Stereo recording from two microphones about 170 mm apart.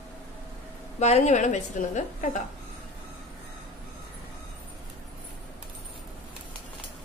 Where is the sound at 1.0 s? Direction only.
40° left (ahead or behind).